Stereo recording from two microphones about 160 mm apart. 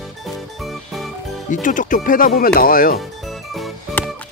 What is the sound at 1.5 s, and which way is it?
Speech, 55° left (ahead or behind).